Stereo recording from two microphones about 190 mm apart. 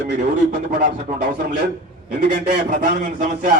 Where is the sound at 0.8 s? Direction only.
45° right (ahead or behind).